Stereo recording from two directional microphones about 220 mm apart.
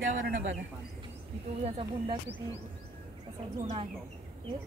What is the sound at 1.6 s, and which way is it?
Speech, 25° right (ahead or behind).